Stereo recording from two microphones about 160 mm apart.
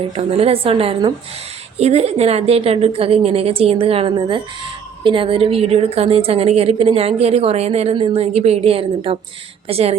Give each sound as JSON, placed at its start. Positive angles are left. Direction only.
{"t": 0.2, "sound": "a woman's voice", "side_deg": -40}